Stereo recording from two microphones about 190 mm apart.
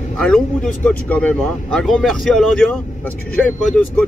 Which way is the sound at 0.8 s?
5° left (ahead or behind).